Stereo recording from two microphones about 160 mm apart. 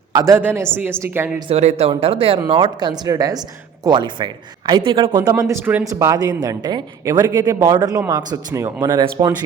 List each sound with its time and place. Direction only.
0.1 s a man's voice: 20° right (ahead or behind)
1.4 s speech: 40° right (ahead or behind)
5.4 s speech: 15° right (ahead or behind)